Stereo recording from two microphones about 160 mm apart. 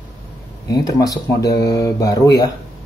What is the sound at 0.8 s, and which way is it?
Speech, 20° left (ahead or behind).